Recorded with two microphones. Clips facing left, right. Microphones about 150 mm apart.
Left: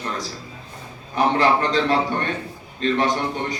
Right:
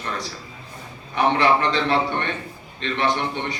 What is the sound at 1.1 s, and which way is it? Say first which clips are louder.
A man's voice: even; 40° left (ahead or behind).